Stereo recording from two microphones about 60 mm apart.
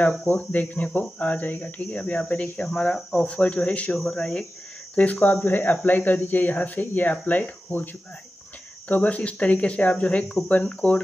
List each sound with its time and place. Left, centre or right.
0.3 s speech: left
3.9 s speech: centre
4.9 s speech: left